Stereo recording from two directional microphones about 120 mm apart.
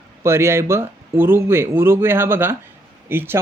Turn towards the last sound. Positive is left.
turn(degrees=-20)  # may be behind; listen again after turning